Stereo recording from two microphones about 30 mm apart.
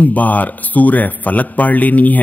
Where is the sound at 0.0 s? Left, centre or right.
Left.